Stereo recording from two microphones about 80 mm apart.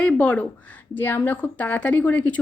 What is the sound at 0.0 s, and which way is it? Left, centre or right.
A woman's voice, centre.